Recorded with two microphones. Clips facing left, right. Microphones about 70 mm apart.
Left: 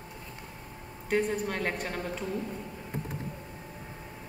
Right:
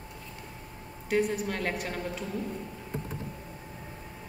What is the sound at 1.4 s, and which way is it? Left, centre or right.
Speech, centre.